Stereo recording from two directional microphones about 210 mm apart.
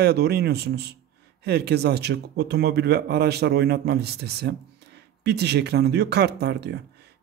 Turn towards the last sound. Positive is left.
turn(degrees=-55)  # may be behind; listen again after turning